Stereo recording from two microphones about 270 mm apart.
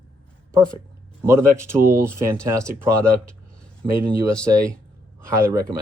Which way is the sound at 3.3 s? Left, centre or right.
Centre.